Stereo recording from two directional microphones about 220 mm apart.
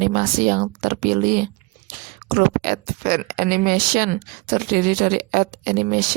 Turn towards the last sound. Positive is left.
turn(degrees=-40)  # may be behind; listen again after turning